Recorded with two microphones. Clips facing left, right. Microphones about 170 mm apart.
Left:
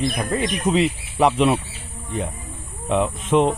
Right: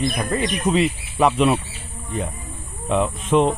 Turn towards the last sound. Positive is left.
turn(degrees=15)  # may be behind; listen again after turning